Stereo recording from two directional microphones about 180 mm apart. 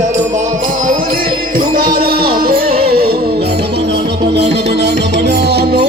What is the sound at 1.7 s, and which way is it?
Music, 50° right (ahead or behind).